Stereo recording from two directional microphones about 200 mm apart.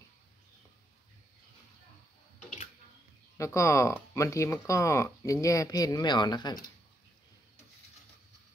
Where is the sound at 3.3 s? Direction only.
15° left (ahead or behind).